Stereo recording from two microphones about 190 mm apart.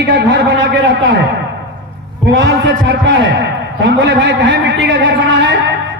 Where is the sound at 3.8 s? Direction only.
70° right (ahead or behind).